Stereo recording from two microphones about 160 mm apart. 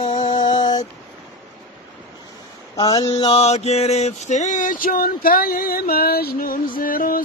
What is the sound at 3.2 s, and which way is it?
Male singing, 40° left (ahead or behind).